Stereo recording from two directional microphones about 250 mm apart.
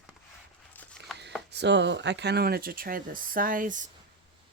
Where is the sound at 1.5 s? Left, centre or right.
Right.